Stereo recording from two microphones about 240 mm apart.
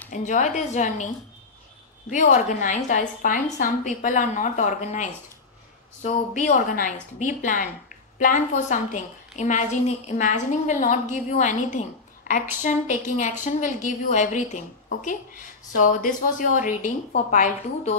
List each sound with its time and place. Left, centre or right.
0.1 s a woman's voice: left